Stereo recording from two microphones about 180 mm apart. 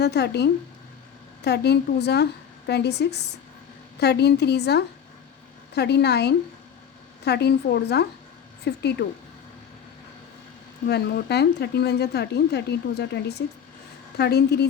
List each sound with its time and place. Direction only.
0.0 s a woman's voice: 65° left (ahead or behind)
10.8 s speech: 65° left (ahead or behind)